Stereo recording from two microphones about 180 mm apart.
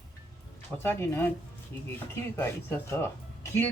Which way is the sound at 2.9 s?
10° left (ahead or behind).